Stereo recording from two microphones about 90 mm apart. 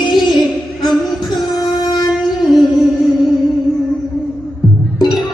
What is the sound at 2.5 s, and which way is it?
Music, centre (ahead or behind).